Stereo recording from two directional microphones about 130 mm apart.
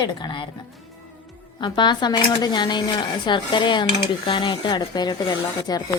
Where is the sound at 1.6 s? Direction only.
35° left (ahead or behind).